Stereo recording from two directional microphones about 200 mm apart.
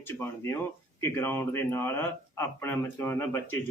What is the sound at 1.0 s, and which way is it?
Speech, 10° left (ahead or behind).